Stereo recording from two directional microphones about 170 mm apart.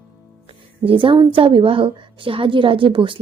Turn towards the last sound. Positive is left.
turn(degrees=-30)  # may be behind; listen again after turning